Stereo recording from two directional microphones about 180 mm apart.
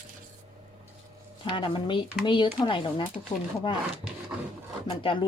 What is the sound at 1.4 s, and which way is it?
Speech, 30° left (ahead or behind).